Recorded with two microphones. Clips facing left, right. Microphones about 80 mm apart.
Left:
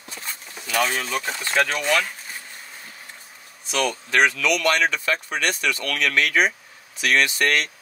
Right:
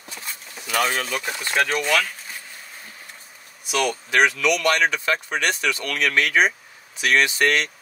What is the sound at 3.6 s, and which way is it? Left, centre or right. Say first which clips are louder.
Speech: right 1 dB; centre.